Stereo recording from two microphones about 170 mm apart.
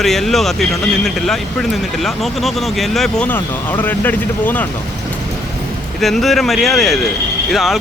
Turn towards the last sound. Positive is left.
turn(degrees=0)  # may be behind; listen again after turning